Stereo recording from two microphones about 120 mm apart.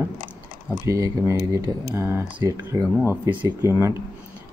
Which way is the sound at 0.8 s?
25° right (ahead or behind).